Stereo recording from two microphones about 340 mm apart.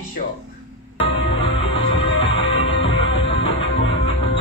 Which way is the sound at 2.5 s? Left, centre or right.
Centre.